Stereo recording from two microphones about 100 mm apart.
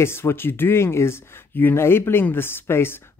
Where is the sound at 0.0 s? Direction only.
25° left (ahead or behind).